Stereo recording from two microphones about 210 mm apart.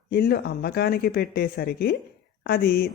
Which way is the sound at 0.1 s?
50° left (ahead or behind).